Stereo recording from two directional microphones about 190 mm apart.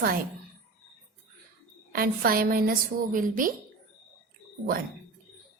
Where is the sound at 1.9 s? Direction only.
50° right (ahead or behind).